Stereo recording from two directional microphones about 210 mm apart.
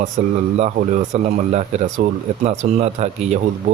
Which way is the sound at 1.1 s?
30° right (ahead or behind).